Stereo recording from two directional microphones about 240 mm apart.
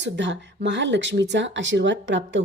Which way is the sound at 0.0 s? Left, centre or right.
Right.